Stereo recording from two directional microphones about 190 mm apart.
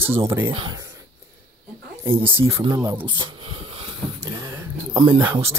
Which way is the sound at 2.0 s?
10° right (ahead or behind).